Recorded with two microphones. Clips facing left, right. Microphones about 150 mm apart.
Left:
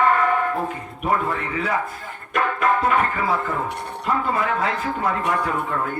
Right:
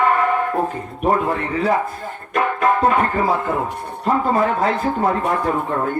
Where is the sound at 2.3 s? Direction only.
35° right (ahead or behind).